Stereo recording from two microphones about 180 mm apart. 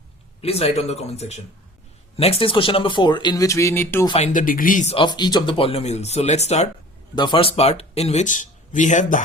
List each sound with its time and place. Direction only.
0.4 s speech: 35° left (ahead or behind); by 4.0 s 15° left (ahead or behind)
4.2 s speech: 45° left (ahead or behind)
5.0 s speech: 25° left (ahead or behind)
7.2 s speech: 25° left (ahead or behind); by 9.2 s 45° left (ahead or behind)